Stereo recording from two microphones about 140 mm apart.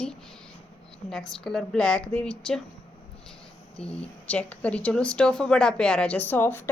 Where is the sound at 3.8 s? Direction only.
10° left (ahead or behind).